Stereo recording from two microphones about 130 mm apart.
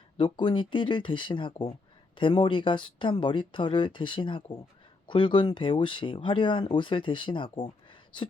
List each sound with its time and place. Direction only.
0.2 s speech: 40° left (ahead or behind)